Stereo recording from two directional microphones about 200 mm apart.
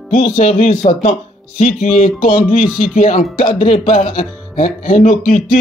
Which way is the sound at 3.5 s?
30° left (ahead or behind).